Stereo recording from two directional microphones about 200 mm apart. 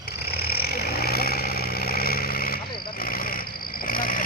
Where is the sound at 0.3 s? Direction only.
50° left (ahead or behind).